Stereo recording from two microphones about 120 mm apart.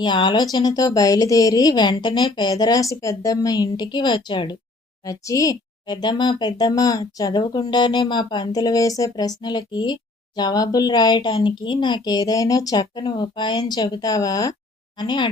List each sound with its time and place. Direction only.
0.0 s speech: 40° left (ahead or behind)
5.0 s speech: 30° left (ahead or behind)